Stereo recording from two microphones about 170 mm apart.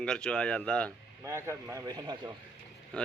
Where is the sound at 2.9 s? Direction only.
5° left (ahead or behind).